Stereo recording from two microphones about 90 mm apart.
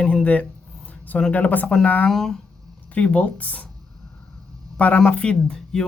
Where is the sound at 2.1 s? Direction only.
5° left (ahead or behind).